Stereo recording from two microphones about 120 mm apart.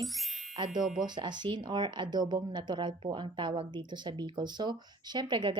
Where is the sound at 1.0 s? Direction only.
40° right (ahead or behind).